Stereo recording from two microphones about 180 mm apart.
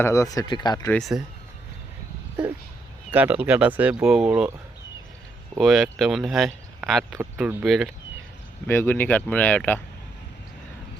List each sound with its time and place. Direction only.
0.0 s speech: 15° left (ahead or behind)
0.9 s speech: 5° left (ahead or behind)
3.1 s speech: 10° right (ahead or behind)
5.5 s speech: centre (ahead or behind)
7.2 s speech: 10° right (ahead or behind)
8.6 s speech: 10° left (ahead or behind)